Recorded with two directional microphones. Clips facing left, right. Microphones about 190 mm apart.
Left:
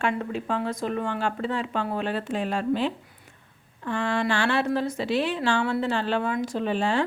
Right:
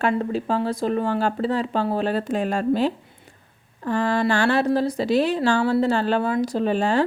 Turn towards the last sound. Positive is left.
turn(degrees=-40)  # may be behind; listen again after turning